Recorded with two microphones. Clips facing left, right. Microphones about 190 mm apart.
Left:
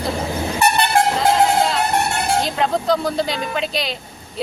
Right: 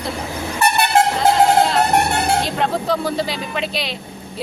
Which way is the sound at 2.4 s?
Centre (ahead or behind).